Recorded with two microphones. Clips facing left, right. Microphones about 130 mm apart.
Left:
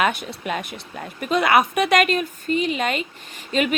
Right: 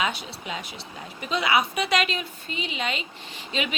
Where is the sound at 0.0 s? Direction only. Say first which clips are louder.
Left 6 dB; 55° left (ahead or behind).